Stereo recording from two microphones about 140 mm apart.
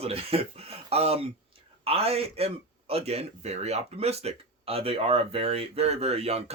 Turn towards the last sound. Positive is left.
turn(degrees=-50)  # may be behind; listen again after turning